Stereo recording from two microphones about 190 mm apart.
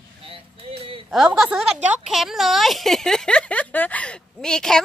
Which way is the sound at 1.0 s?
Centre (ahead or behind).